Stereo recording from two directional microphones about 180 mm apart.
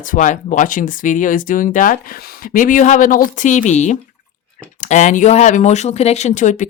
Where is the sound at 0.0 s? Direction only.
45° left (ahead or behind).